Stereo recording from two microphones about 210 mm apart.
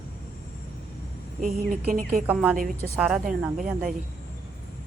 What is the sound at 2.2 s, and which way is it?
Speech, 5° right (ahead or behind).